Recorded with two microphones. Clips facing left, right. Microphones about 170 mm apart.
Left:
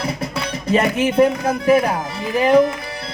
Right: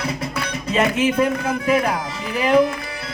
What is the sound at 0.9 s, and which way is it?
Speech, 30° left (ahead or behind).